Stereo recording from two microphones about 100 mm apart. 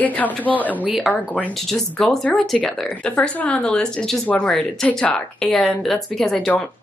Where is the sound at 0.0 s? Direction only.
15° left (ahead or behind).